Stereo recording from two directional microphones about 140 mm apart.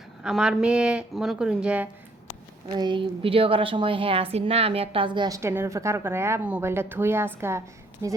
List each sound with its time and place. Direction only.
0.2 s speech: 5° right (ahead or behind)
2.7 s a woman's voice: 35° right (ahead or behind)
5.4 s a woman's voice: 20° right (ahead or behind)